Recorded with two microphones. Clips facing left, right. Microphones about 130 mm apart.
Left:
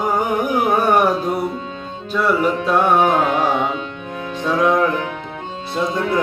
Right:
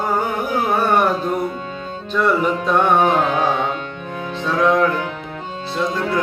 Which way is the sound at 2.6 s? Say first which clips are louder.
Even; 5° left (ahead or behind).